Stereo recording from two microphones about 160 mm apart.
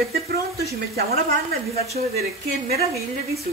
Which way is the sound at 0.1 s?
75° right (ahead or behind).